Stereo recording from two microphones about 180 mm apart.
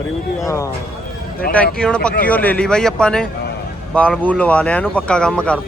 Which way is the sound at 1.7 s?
5° left (ahead or behind).